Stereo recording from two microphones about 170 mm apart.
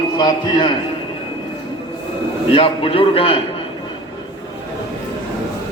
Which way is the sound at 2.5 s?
35° left (ahead or behind).